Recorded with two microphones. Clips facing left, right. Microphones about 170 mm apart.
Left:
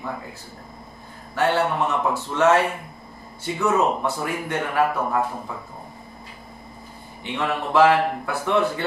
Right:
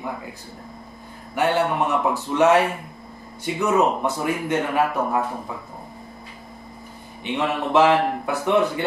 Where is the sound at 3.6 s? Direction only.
20° right (ahead or behind).